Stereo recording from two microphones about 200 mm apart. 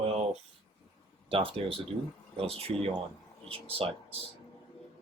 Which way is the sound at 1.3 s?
25° right (ahead or behind).